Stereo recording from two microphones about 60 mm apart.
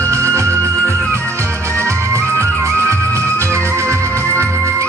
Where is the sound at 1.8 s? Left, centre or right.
Right.